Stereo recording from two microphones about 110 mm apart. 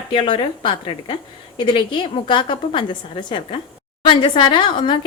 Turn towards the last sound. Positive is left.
turn(degrees=45)  # may be behind; listen again after turning